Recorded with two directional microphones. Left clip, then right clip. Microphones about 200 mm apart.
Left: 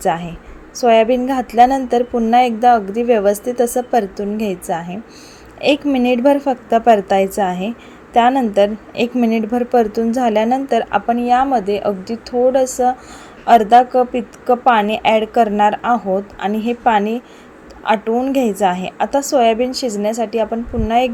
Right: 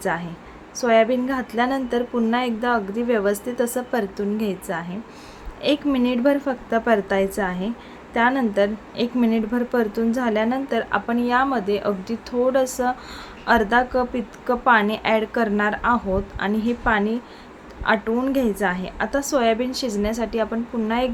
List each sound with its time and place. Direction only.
0.0 s a woman's voice: 20° left (ahead or behind)